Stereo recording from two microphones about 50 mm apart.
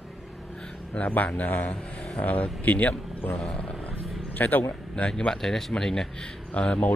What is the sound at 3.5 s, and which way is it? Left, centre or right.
Wild animals, left.